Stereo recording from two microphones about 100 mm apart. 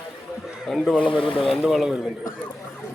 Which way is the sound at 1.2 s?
65° left (ahead or behind).